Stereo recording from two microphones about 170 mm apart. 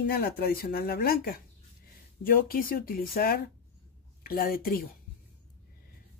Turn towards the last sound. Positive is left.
turn(degrees=60)  # may be behind; listen again after turning